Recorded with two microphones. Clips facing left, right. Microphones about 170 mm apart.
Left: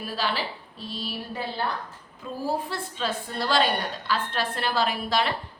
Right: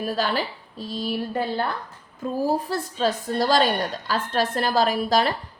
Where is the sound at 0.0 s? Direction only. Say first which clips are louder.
Right 5 dB; 45° right (ahead or behind).